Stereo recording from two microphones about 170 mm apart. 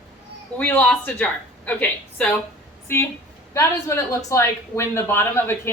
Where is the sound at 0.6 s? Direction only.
10° left (ahead or behind).